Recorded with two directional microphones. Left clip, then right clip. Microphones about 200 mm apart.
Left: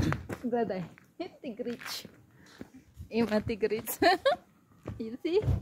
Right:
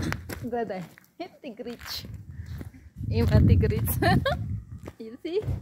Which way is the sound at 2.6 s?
50° right (ahead or behind).